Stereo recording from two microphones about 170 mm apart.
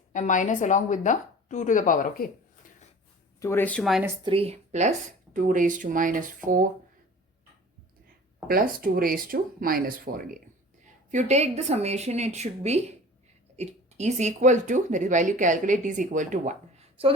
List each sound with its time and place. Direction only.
0.1 s a woman's voice: 50° left (ahead or behind)
3.4 s speech: 10° left (ahead or behind)
4.2 s speech: 30° right (ahead or behind); by 6.7 s 55° right (ahead or behind)
8.4 s speech: 55° right (ahead or behind)
11.1 s a woman's voice: 40° right (ahead or behind)